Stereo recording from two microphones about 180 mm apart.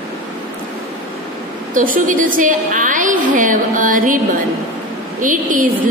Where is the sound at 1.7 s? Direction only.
50° right (ahead or behind).